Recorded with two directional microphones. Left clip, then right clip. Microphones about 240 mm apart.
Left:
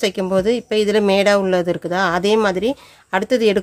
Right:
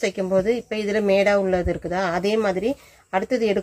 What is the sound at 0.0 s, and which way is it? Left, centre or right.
Speech, left.